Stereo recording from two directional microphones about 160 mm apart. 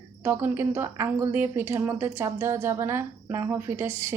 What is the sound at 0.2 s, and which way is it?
A woman's voice, 15° right (ahead or behind).